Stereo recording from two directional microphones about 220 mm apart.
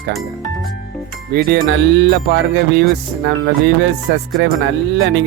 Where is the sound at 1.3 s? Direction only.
45° right (ahead or behind).